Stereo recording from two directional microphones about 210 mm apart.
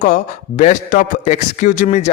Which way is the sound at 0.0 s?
40° left (ahead or behind).